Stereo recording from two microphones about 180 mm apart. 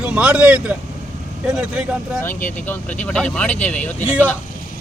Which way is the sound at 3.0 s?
5° left (ahead or behind).